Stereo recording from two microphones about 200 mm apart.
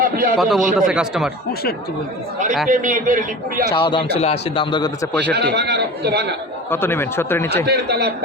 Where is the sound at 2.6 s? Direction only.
40° right (ahead or behind).